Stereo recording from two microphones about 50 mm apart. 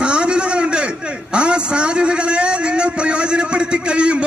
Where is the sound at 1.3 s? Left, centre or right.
Right.